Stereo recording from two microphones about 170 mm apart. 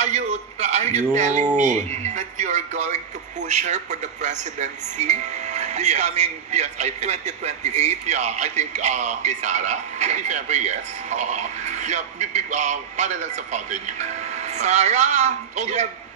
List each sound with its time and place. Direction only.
0.0 s a man's voice: 40° right (ahead or behind)